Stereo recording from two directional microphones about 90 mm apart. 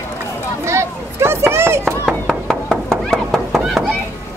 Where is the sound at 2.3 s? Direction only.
5° left (ahead or behind).